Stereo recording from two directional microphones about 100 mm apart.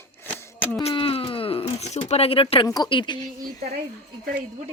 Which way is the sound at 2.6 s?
40° left (ahead or behind).